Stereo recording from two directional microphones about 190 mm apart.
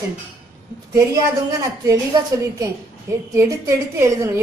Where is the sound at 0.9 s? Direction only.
15° right (ahead or behind).